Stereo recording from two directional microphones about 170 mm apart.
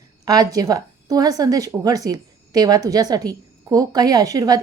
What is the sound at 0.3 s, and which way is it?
A woman's voice, 20° right (ahead or behind).